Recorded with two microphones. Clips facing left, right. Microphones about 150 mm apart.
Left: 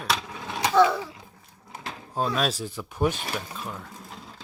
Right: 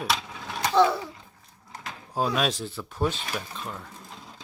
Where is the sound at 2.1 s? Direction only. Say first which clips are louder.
Even; 5° right (ahead or behind).